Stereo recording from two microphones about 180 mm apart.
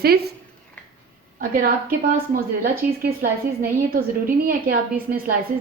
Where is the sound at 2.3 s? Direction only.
55° right (ahead or behind).